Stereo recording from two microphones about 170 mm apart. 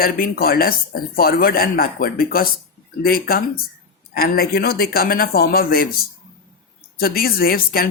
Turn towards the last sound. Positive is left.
turn(degrees=60)  # may be behind; listen again after turning